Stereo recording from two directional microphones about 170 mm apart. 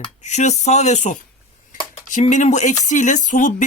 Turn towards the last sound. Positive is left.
turn(degrees=50)  # may be behind; listen again after turning